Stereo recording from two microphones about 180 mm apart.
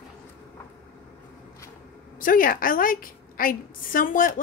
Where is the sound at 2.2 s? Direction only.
50° left (ahead or behind).